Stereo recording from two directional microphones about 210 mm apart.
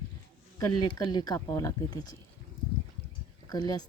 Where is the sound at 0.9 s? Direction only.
20° left (ahead or behind).